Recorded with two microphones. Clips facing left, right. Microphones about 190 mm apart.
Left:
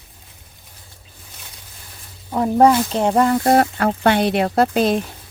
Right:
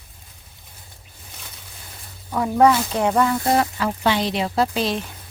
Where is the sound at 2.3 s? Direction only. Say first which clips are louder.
Left 3 dB; 35° left (ahead or behind); by 5.0 s 50° left (ahead or behind).